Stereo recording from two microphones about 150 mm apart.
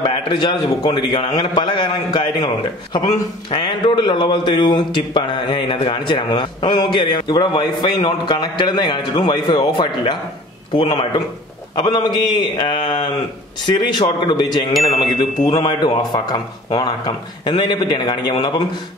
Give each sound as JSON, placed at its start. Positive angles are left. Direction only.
{"t": 0.0, "sound": "a man's voice", "side_deg": 35}
{"t": 14.7, "sound": "chime", "side_deg": 0}
{"t": 15.6, "sound": "speech", "side_deg": 30}